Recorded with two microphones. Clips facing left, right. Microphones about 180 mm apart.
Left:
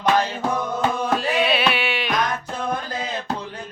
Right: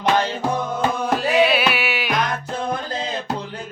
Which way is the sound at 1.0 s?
Centre (ahead or behind).